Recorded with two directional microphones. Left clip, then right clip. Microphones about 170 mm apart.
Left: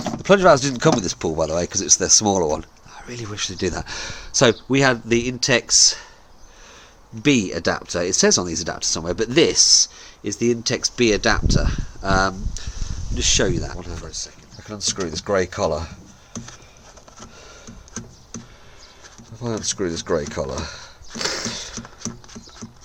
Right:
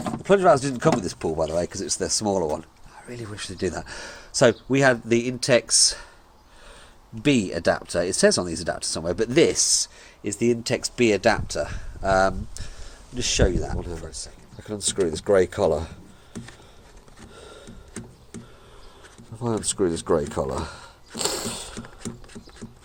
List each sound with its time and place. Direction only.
0.2 s speech: 25° left (ahead or behind); by 6.1 s 5° right (ahead or behind)
7.2 s speech: centre (ahead or behind)
14.6 s speech: 10° right (ahead or behind)
19.4 s speech: 10° right (ahead or behind)
21.2 s a sound: centre (ahead or behind)